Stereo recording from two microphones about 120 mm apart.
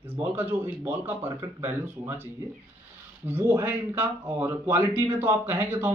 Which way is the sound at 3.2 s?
20° right (ahead or behind).